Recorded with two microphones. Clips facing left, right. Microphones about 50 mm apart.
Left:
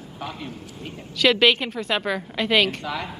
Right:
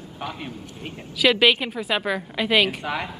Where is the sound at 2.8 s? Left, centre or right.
Centre.